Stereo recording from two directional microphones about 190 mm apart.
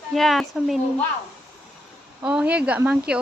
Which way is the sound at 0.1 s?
Centre (ahead or behind).